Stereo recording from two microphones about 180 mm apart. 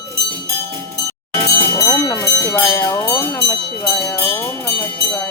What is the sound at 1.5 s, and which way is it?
Bell, 15° left (ahead or behind).